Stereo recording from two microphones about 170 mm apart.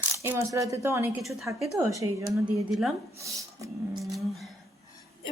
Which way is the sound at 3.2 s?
20° right (ahead or behind).